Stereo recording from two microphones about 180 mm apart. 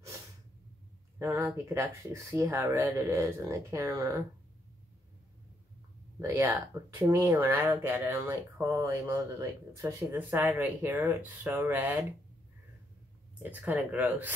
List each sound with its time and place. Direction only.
1.1 s speech: 15° right (ahead or behind)
6.1 s speech: 10° right (ahead or behind)
13.4 s speech: 10° right (ahead or behind)